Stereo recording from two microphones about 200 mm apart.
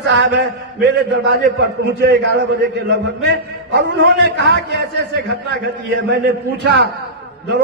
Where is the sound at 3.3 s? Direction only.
60° right (ahead or behind).